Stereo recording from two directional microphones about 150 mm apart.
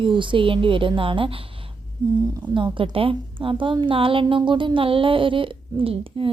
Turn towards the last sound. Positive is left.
turn(degrees=-35)  # may be behind; listen again after turning